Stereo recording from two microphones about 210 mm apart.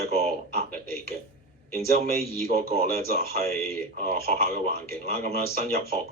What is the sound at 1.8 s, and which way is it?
Speech, 45° right (ahead or behind).